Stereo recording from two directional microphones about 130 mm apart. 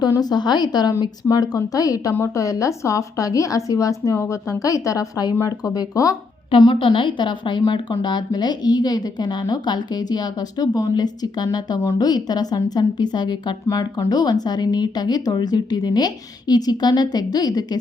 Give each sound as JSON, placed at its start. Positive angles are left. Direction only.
{"t": 0.0, "sound": "speech", "side_deg": 30}
{"t": 6.5, "sound": "speech", "side_deg": 40}